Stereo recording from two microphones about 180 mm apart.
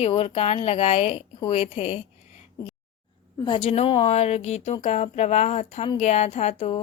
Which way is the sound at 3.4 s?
30° left (ahead or behind).